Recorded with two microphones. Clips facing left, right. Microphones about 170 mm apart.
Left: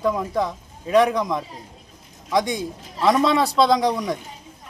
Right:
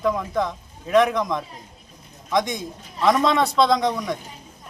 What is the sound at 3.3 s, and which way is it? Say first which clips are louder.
Speech: left 1 dB; 35° left (ahead or behind).